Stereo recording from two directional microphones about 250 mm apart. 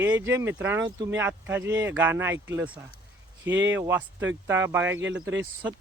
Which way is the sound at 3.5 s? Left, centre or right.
Right.